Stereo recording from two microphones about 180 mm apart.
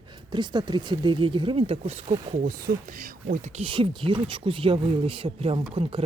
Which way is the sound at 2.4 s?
50° right (ahead or behind).